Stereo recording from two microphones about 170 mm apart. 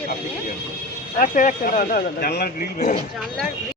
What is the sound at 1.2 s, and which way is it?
Speech, 50° left (ahead or behind).